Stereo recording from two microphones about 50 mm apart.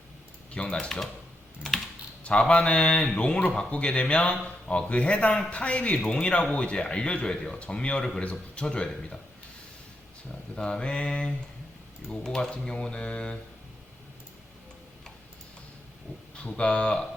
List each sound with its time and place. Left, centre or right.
0.5 s a man's voice: left
2.5 s a man's voice: left
10.5 s speech: centre
16.3 s speech: left